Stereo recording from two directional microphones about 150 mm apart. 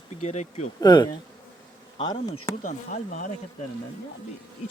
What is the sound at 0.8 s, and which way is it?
Bee, 25° left (ahead or behind).